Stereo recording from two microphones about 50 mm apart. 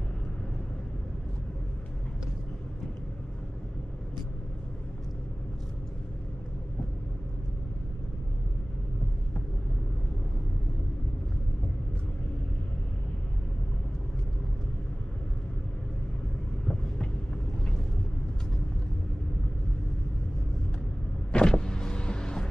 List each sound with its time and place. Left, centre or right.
21.3 s power windows: centre